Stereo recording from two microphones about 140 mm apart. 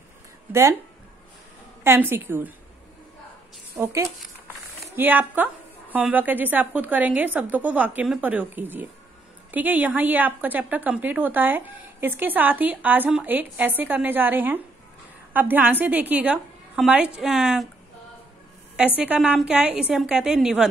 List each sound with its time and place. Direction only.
0.5 s speech: 20° right (ahead or behind)
1.8 s a woman's voice: 15° right (ahead or behind)
3.7 s a woman's voice: 20° right (ahead or behind); by 17.6 s 5° right (ahead or behind)
18.9 s a woman's voice: 10° right (ahead or behind)